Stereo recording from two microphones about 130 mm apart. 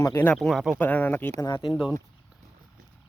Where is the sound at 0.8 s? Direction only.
15° left (ahead or behind).